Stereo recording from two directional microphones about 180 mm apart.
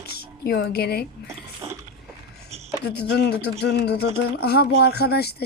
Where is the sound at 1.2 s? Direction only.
15° right (ahead or behind).